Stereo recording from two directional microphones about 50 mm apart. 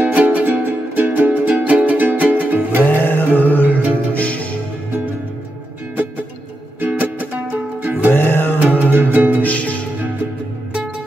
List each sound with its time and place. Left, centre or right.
0.0 s music: right
2.8 s music: left
6.8 s music: right
8.1 s music: left
8.5 s music: right
9.4 s music: left